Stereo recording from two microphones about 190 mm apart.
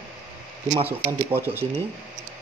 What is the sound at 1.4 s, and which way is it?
Speech, 10° right (ahead or behind).